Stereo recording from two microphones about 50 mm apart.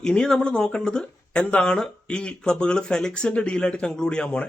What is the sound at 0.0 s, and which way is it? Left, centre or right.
A man's voice, centre.